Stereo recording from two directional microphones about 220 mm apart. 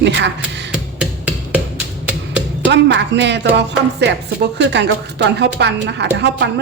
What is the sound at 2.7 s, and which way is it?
A woman's voice, 55° right (ahead or behind).